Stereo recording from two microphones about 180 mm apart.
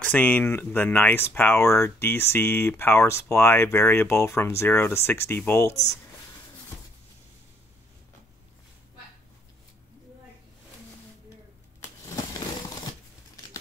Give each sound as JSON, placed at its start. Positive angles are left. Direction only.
{"t": 0.0, "sound": "speech", "side_deg": 10}